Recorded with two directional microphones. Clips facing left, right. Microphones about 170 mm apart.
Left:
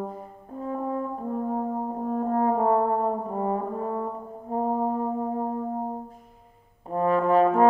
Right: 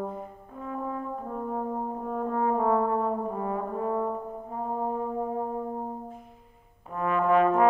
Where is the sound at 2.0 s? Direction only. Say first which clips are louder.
Left 4 dB; 40° left (ahead or behind).